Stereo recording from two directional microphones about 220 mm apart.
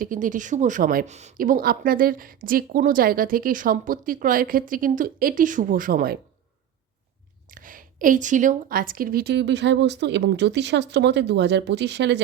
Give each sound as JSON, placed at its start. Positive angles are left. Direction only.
{"t": 0.0, "sound": "a woman's voice", "side_deg": -35}
{"t": 7.5, "sound": "a woman's voice", "side_deg": -40}